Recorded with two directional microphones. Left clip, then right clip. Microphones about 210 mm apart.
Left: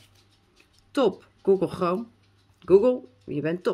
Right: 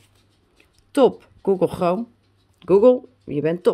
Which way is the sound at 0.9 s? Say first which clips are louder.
Right 7 dB; 35° right (ahead or behind).